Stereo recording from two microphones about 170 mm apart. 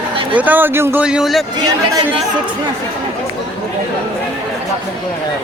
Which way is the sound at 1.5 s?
20° right (ahead or behind).